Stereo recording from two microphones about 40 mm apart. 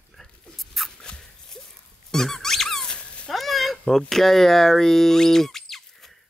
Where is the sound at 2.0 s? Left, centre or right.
Centre.